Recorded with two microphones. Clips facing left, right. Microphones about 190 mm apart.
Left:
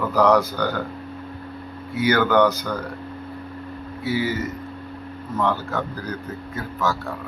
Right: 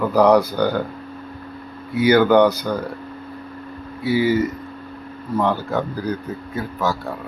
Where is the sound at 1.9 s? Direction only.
15° right (ahead or behind).